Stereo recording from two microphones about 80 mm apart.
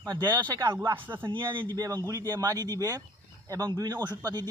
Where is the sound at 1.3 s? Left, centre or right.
Right.